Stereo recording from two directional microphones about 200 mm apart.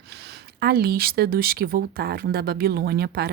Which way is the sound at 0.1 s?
55° right (ahead or behind).